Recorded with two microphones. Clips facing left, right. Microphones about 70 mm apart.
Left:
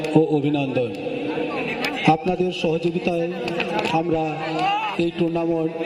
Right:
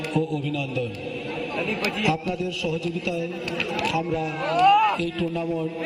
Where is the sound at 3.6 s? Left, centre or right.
Left.